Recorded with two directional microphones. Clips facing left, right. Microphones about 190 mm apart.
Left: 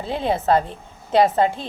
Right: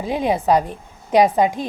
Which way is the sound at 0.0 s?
15° right (ahead or behind).